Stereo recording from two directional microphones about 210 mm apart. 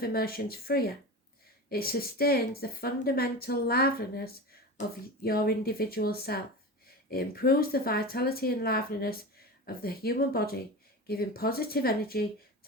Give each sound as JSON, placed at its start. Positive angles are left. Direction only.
{"t": 0.0, "sound": "a woman's voice", "side_deg": 45}